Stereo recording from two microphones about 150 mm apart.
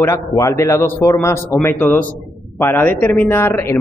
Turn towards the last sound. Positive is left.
turn(degrees=15)  # may be behind; listen again after turning